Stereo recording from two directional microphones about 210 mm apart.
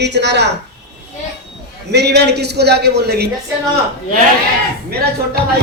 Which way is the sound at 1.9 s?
50° right (ahead or behind).